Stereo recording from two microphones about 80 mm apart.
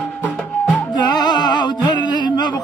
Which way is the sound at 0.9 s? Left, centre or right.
Left.